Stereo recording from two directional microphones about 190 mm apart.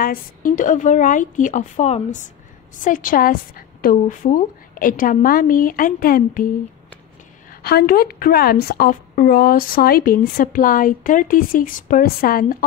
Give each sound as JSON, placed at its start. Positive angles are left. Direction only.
{"t": 0.0, "sound": "a woman's voice", "side_deg": 50}
{"t": 7.6, "sound": "a woman's voice", "side_deg": 55}